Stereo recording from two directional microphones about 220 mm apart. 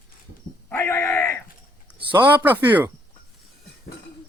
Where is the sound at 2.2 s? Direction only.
10° right (ahead or behind).